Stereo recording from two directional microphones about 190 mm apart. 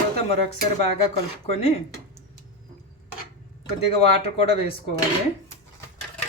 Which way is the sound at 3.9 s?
30° left (ahead or behind).